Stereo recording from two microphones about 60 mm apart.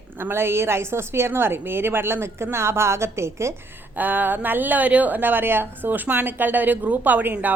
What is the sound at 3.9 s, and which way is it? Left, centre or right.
A woman's voice, right.